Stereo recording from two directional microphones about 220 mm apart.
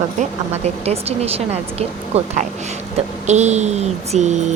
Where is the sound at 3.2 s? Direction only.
30° right (ahead or behind).